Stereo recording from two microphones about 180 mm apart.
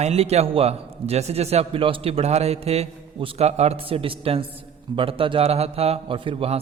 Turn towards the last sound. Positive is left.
turn(degrees=-30)  # may be behind; listen again after turning